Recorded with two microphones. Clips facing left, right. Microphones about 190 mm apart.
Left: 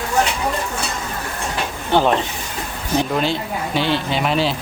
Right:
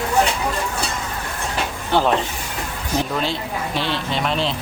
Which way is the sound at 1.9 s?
Centre (ahead or behind).